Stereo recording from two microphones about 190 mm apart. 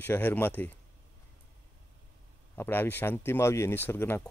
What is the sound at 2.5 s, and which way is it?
Speech, 10° left (ahead or behind).